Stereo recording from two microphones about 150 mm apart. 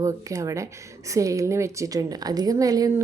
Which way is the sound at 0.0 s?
20° right (ahead or behind).